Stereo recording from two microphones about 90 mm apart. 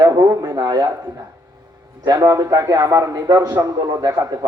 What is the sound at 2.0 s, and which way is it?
A man's voice, 40° right (ahead or behind).